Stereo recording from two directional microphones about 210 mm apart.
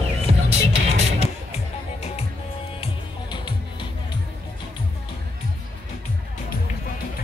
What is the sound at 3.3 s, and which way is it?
Music, 20° left (ahead or behind).